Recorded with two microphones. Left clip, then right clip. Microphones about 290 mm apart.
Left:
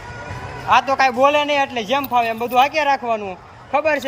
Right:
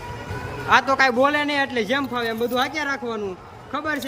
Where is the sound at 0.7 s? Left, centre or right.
Centre.